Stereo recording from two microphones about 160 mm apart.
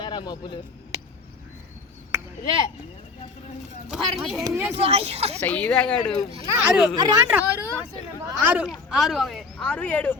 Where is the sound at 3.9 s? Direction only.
Centre (ahead or behind).